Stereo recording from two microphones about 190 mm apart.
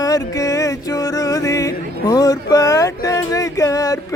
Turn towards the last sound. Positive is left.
turn(degrees=15)  # may be behind; listen again after turning